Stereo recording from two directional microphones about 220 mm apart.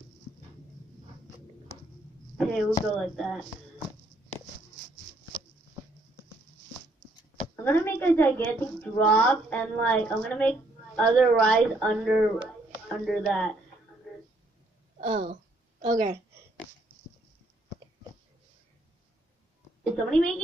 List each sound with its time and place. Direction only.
2.3 s speech: centre (ahead or behind)
7.6 s a woman's voice: 10° left (ahead or behind)
15.0 s a woman's voice: 30° right (ahead or behind)
19.8 s a woman's voice: 5° left (ahead or behind)